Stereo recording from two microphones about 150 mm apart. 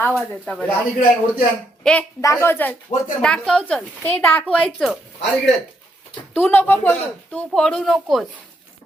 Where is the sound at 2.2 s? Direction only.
20° left (ahead or behind).